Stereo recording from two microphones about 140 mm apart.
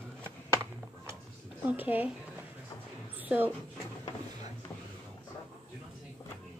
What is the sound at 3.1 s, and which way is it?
Speech, 10° right (ahead or behind).